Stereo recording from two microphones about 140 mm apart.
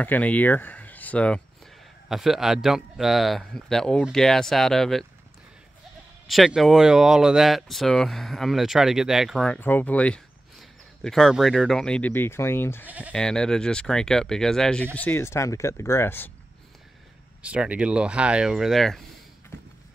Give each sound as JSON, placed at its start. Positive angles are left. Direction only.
{"t": 0.0, "sound": "speech", "side_deg": 10}
{"t": 2.0, "sound": "speech", "side_deg": 0}
{"t": 6.2, "sound": "speech", "side_deg": 0}
{"t": 9.5, "sound": "speech", "side_deg": 15}
{"t": 12.8, "sound": "speech", "side_deg": -10}
{"t": 13.1, "sound": "speech", "side_deg": 5}
{"t": 17.4, "sound": "speech", "side_deg": -10}